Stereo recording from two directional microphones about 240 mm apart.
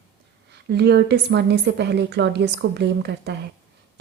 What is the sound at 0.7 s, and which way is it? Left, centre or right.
A woman's voice, right.